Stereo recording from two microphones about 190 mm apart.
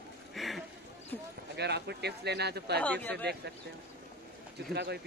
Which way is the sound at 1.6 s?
60° right (ahead or behind).